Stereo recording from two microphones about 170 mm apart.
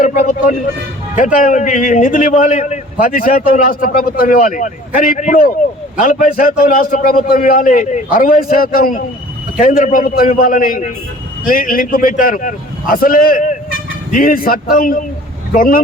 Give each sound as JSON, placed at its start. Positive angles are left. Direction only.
{"t": 0.0, "sound": "a man's voice", "side_deg": 50}